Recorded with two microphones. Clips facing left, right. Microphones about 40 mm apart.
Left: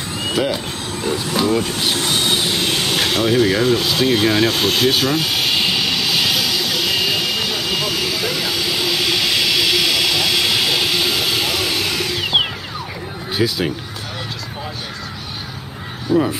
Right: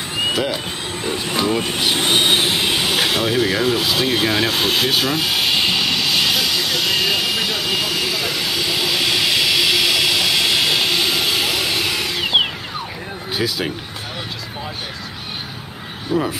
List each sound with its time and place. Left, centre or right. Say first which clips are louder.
0.9 s vehicle: left 3 dB; right
1.3 s speech: left 2 dB; centre
1.6 s vehicle: right 1 dB; right; by 12.4 s centre
13.3 s speech: left 3 dB; centre
16.1 s speech: left 4 dB; centre